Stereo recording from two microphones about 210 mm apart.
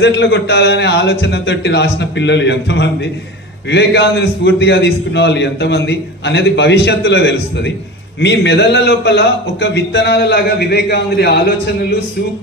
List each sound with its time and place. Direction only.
0.0 s a man's voice: 55° left (ahead or behind)